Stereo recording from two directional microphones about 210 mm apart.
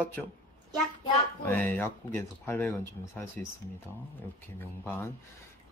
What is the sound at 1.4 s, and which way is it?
Speech, 10° left (ahead or behind).